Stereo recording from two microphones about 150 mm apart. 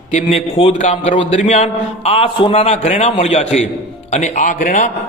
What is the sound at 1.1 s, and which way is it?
Speech, 35° left (ahead or behind).